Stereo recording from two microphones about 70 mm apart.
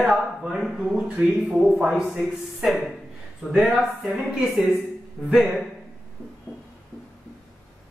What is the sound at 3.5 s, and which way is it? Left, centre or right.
A man's voice, centre.